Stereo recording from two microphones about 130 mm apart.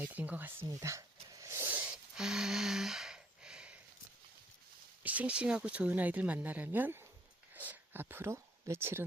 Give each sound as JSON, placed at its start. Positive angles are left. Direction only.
{"t": 0.0, "sound": "speech", "side_deg": -10}
{"t": 0.8, "sound": "a sound", "side_deg": -25}
{"t": 5.0, "sound": "speech", "side_deg": -10}